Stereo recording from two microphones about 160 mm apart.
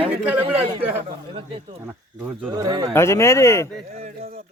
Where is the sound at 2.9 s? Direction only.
15° left (ahead or behind).